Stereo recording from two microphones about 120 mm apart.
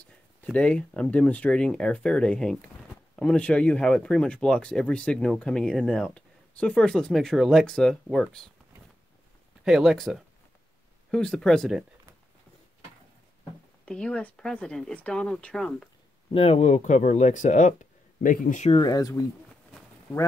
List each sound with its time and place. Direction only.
0.0 s speech: 10° left (ahead or behind)
9.7 s speech: 5° right (ahead or behind)
13.8 s speech: 5° left (ahead or behind)
16.3 s speech: 55° left (ahead or behind); by 18.7 s 90° left
18.7 s speech: 35° left (ahead or behind)